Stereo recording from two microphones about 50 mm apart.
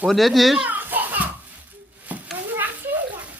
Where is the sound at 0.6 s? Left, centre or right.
Right.